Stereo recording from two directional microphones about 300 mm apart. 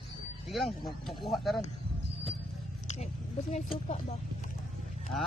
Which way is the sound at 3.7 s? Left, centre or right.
Left.